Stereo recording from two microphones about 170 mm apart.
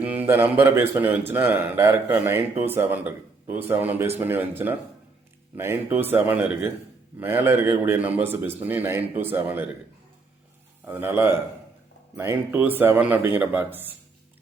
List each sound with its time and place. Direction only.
0.0 s a man's voice: 10° right (ahead or behind)
10.8 s a man's voice: 15° right (ahead or behind)